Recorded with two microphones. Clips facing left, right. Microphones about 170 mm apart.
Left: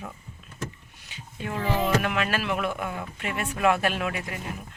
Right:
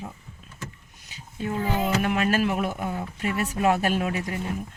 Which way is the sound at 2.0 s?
35° right (ahead or behind).